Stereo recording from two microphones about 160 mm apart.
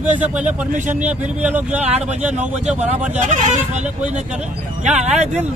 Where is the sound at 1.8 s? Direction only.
45° right (ahead or behind).